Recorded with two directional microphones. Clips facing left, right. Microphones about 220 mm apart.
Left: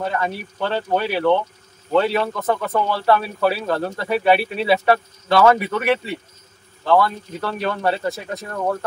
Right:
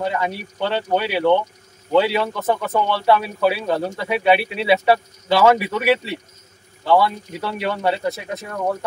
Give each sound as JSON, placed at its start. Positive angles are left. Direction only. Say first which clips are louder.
{"t": 0.2, "sound": "speech", "louder": "right 1 dB", "side_deg": -5}